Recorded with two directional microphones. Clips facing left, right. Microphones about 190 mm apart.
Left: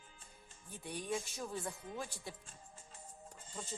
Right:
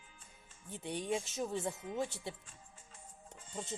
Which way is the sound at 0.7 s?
20° right (ahead or behind).